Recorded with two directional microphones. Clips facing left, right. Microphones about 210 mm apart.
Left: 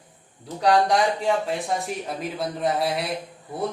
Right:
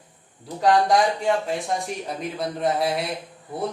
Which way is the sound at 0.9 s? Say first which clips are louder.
Right 1 dB; centre (ahead or behind).